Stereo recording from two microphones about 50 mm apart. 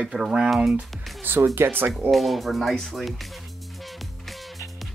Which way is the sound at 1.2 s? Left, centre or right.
Right.